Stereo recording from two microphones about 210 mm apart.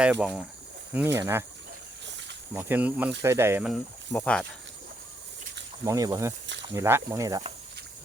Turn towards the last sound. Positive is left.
turn(degrees=-15)  # may be behind; listen again after turning